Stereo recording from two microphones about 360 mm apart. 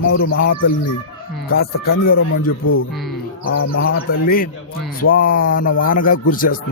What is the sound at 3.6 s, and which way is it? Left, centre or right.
Speech, left.